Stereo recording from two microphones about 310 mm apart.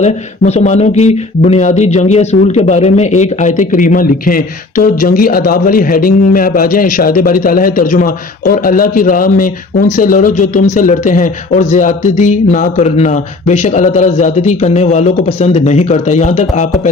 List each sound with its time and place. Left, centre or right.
0.0 s speech: left